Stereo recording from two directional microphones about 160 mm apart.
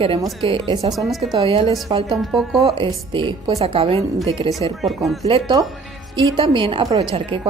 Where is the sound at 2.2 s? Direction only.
Centre (ahead or behind).